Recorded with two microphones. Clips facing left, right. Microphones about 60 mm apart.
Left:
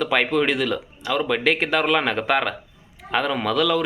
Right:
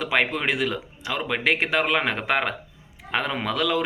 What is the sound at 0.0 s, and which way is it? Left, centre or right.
A man's voice, right.